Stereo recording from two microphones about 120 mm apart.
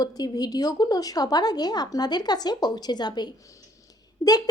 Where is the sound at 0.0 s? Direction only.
35° left (ahead or behind).